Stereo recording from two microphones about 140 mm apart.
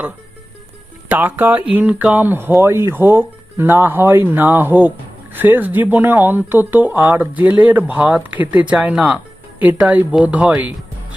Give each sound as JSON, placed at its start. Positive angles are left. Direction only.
{"t": 1.0, "sound": "speech", "side_deg": -15}